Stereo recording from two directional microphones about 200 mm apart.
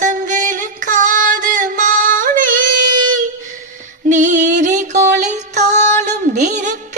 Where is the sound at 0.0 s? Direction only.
40° right (ahead or behind).